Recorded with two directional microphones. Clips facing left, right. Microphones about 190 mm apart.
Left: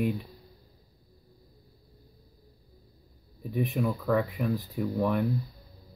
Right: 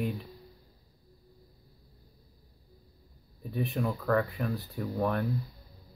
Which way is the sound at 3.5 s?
20° left (ahead or behind).